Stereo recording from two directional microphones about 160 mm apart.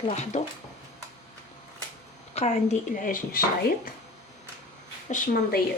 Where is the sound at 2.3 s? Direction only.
45° left (ahead or behind); by 3.4 s 60° left (ahead or behind).